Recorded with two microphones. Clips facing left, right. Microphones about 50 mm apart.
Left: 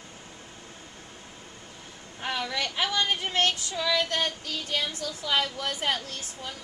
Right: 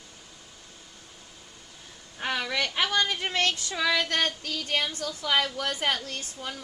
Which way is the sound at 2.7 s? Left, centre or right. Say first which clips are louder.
Even; right.